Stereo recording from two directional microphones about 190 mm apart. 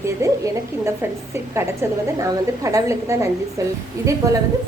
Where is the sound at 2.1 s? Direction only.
20° right (ahead or behind).